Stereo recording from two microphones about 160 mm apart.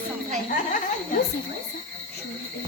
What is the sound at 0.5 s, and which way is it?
Speech, 55° left (ahead or behind).